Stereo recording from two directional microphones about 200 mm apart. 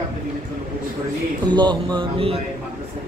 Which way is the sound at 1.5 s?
20° right (ahead or behind).